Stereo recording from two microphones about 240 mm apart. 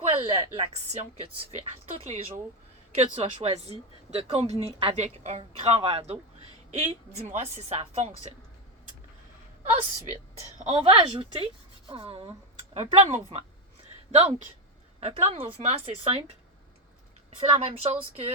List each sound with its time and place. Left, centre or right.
0.0 s a woman's voice: right
10.6 s a woman's voice: right
17.4 s a woman's voice: right